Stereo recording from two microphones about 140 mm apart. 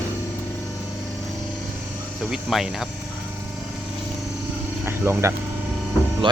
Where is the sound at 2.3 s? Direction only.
Centre (ahead or behind).